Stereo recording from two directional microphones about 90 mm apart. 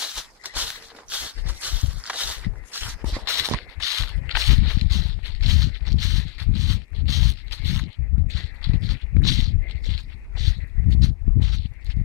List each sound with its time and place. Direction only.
0.0 s walk: 10° right (ahead or behind)
3.2 s walk: 35° right (ahead or behind)
8.6 s a sound: 35° right (ahead or behind)